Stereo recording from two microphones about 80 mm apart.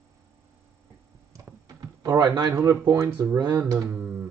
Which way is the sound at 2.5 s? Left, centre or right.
Right.